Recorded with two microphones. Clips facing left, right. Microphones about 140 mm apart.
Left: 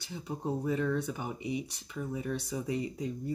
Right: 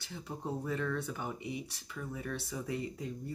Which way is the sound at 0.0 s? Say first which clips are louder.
Left 4 dB; 15° left (ahead or behind).